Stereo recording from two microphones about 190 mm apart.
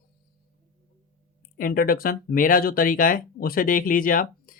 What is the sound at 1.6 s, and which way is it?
Speech, 50° left (ahead or behind).